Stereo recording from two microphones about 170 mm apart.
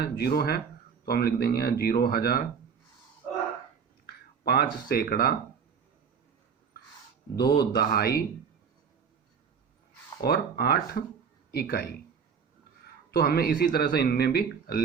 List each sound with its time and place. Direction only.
0.2 s speech: 65° left (ahead or behind)
4.0 s speech: 65° left (ahead or behind)
7.3 s speech: 65° left (ahead or behind)
10.2 s speech: 65° left (ahead or behind)
13.1 s speech: 65° left (ahead or behind)